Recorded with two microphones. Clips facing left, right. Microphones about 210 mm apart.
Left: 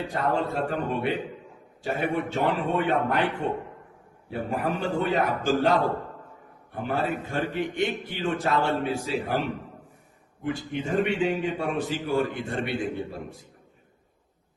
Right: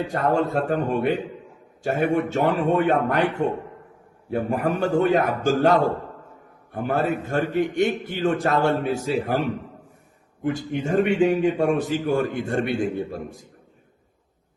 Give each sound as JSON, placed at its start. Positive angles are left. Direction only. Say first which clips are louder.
{"t": 0.1, "sound": "a man's voice", "louder": "right 5 dB", "side_deg": -45}
{"t": 6.8, "sound": "a man's voice", "louder": "right 4 dB", "side_deg": -45}
{"t": 10.4, "sound": "a man's voice", "louder": "right 4 dB", "side_deg": -45}